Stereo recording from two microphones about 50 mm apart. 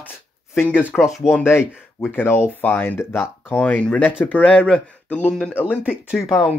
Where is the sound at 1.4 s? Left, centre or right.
Left.